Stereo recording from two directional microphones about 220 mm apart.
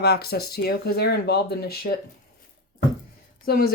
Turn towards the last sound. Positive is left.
turn(degrees=45)  # may be behind; listen again after turning